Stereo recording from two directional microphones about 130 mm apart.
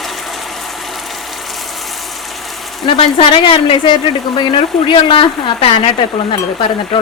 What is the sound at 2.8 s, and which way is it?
Speech, 40° left (ahead or behind).